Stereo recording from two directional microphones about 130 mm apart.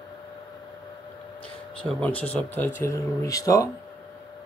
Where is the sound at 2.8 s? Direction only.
25° left (ahead or behind).